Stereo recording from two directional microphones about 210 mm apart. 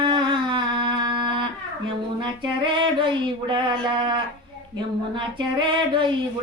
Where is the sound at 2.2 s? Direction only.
25° right (ahead or behind).